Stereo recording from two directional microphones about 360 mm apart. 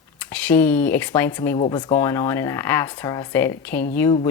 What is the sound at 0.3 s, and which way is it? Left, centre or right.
Speech, centre.